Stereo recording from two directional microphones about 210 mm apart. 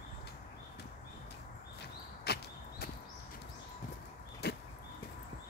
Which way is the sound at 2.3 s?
50° left (ahead or behind).